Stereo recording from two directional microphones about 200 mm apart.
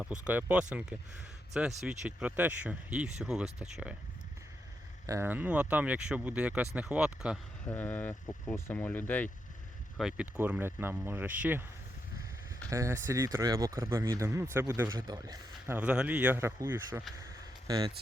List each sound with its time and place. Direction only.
0.0 s speech: 5° right (ahead or behind)
5.0 s speech: 15° right (ahead or behind)
7.7 s speech: 10° left (ahead or behind)
10.0 s speech: 5° right (ahead or behind)
12.7 s speech: 15° right (ahead or behind)